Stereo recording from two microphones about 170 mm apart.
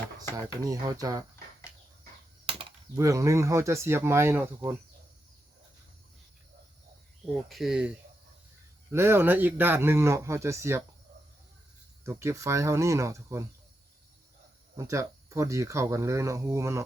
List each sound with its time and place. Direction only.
0.6 s speech: 20° right (ahead or behind)
2.5 s chop: 30° right (ahead or behind)
2.9 s speech: 20° right (ahead or behind)
7.5 s speech: 5° right (ahead or behind)
12.0 s speech: 15° right (ahead or behind)
14.8 s speech: 20° right (ahead or behind)